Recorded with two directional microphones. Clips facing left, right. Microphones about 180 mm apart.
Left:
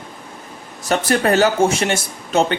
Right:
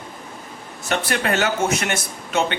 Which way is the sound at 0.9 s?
40° left (ahead or behind).